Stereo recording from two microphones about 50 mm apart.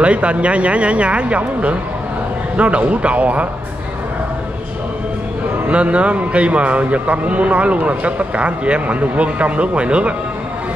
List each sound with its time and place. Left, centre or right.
0.0 s a man's voice: right
5.7 s a man's voice: right